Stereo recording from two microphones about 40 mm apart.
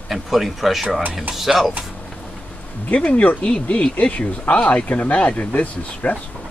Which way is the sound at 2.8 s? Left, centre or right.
Left.